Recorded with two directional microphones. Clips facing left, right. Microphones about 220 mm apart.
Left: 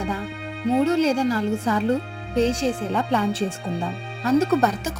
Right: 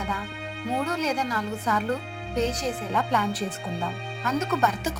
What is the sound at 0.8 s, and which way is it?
A woman's voice, 25° left (ahead or behind).